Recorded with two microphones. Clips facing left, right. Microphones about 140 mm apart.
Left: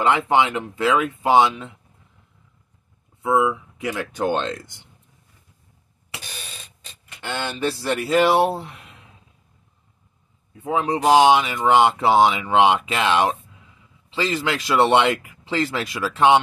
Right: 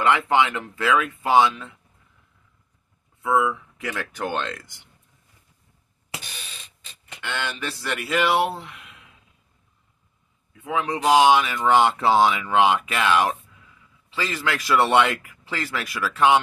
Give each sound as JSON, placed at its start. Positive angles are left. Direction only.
{"t": 0.0, "sound": "speech", "side_deg": 20}
{"t": 3.2, "sound": "speech", "side_deg": 20}
{"t": 7.2, "sound": "speech", "side_deg": 35}
{"t": 10.5, "sound": "speech", "side_deg": 35}